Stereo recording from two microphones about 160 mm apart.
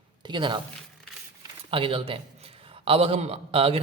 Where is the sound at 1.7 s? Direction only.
35° right (ahead or behind).